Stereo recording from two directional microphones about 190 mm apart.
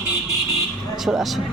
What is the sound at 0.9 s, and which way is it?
Speech, centre (ahead or behind).